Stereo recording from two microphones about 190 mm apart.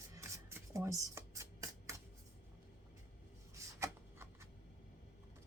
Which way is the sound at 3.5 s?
15° right (ahead or behind).